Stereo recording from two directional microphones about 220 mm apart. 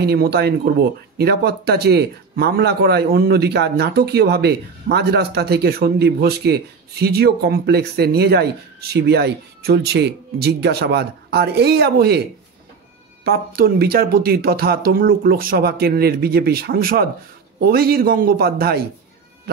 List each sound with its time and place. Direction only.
0.0 s speech: 45° right (ahead or behind)
13.2 s speech: 45° right (ahead or behind)